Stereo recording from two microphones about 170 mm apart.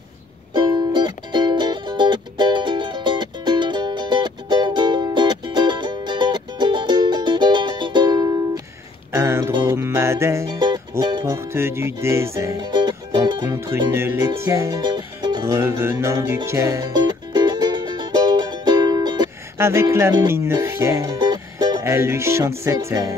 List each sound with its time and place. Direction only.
0.5 s music: 25° right (ahead or behind)